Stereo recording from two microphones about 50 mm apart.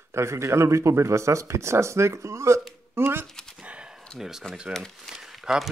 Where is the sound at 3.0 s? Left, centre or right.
Right.